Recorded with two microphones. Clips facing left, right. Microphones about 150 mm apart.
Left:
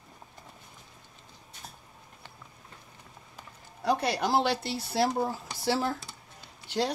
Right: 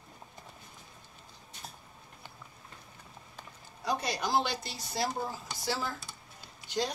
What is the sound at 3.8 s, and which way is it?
Speech, 65° left (ahead or behind).